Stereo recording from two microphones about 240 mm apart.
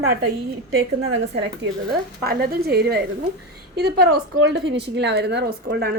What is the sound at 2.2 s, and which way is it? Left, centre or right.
A woman's voice, right.